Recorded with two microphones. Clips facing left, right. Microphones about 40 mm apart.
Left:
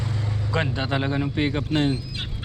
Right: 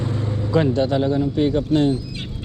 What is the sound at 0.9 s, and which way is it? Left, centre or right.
Speech, left.